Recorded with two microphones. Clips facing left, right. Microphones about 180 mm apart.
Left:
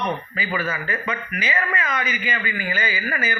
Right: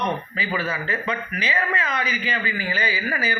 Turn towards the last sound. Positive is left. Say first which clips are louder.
# even
turn(degrees=-30)  # may be behind; listen again after turning